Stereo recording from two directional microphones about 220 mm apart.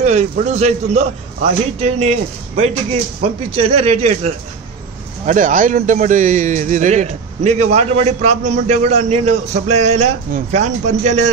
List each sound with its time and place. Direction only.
0.0 s a man's voice: 30° right (ahead or behind)